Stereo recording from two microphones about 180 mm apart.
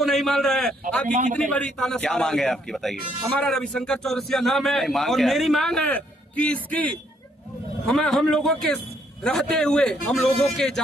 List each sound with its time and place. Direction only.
0.0 s a man's voice: centre (ahead or behind)